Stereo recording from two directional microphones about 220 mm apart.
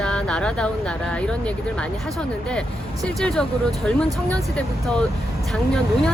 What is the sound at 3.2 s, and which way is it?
Speech, 5° left (ahead or behind).